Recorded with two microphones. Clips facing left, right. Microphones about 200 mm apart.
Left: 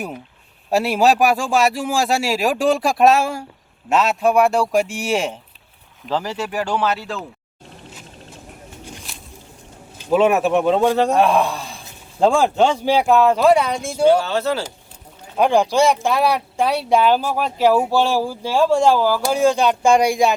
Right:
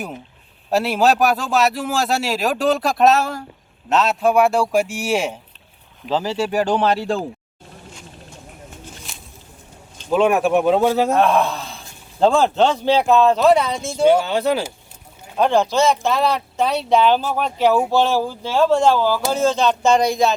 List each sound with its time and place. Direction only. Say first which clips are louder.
0.7 s a man's voice: left 1 dB; centre (ahead or behind)
6.1 s speech: right 3 dB; 25° right (ahead or behind)
10.0 s a man's voice: left 1 dB; 5° left (ahead or behind)
11.2 s speech: even; 10° left (ahead or behind)
14.1 s speech: right 1 dB; 15° right (ahead or behind)
15.4 s speech: left 1 dB; 10° left (ahead or behind)